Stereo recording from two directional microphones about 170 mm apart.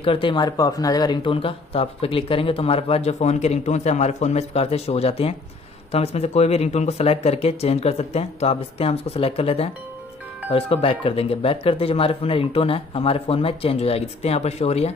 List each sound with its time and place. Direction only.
0.0 s speech: 30° left (ahead or behind)